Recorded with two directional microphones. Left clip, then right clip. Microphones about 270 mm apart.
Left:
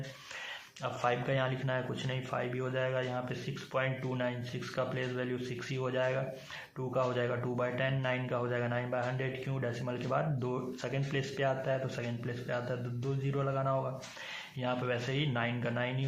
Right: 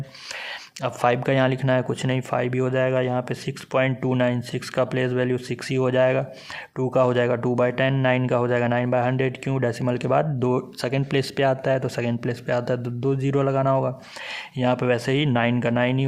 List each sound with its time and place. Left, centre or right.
0.8 s speech: right